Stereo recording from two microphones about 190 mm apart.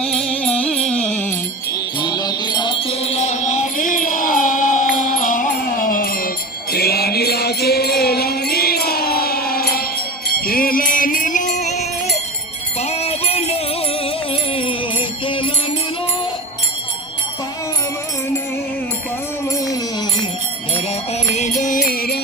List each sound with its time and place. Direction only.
0.0 s music: 5° left (ahead or behind)
2.0 s music: 20° left (ahead or behind); by 11.9 s 40° left (ahead or behind)
12.8 s jingle bell: 35° left (ahead or behind)
14.5 s music: 30° left (ahead or behind)
21.2 s music: 40° left (ahead or behind)